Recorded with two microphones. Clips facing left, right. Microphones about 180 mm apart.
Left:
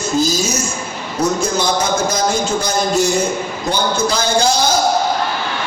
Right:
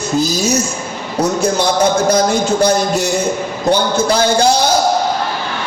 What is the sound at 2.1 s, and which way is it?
Speech, 65° right (ahead or behind).